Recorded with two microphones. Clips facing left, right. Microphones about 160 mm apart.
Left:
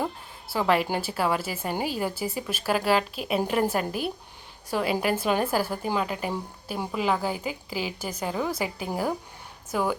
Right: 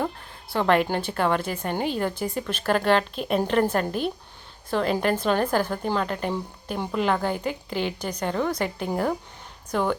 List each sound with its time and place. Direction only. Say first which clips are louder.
0.0 s a woman's voice: right 2 dB; 5° left (ahead or behind)